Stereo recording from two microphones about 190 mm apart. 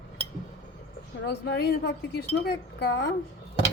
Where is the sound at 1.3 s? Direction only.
55° left (ahead or behind).